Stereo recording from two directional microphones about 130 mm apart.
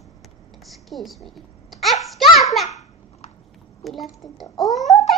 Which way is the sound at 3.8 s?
Centre (ahead or behind).